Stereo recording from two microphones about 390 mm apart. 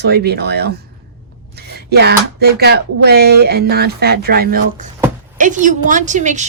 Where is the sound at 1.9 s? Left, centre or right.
Right.